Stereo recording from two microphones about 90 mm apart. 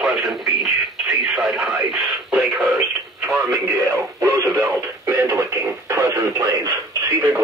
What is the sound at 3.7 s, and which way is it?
Speech, 35° right (ahead or behind).